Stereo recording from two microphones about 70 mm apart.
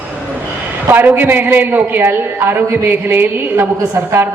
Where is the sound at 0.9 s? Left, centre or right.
Right.